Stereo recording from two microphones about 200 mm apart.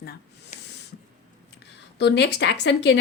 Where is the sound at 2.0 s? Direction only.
60° left (ahead or behind).